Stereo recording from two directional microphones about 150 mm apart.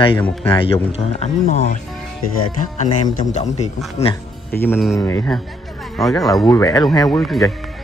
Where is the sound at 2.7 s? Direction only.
55° left (ahead or behind).